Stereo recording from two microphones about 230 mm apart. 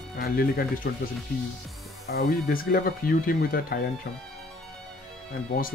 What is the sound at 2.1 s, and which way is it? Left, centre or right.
Speech, left.